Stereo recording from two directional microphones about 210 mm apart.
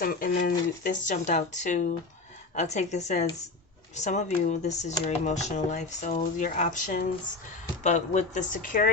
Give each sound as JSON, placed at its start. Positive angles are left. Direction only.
{"t": 0.0, "sound": "speech", "side_deg": 45}